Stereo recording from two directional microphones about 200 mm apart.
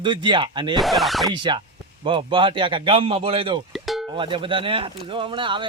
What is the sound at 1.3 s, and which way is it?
Speech, 25° right (ahead or behind).